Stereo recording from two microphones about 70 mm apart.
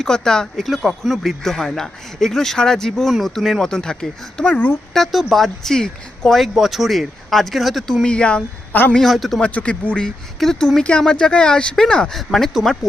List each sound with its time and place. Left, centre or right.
0.0 s speech: centre
4.4 s speech: left
4.9 s speech: centre
8.0 s speech: centre
8.7 s a man's voice: left
9.0 s speech: centre
9.4 s speech: centre